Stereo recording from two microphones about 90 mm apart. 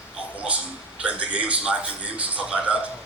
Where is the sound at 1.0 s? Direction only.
15° right (ahead or behind).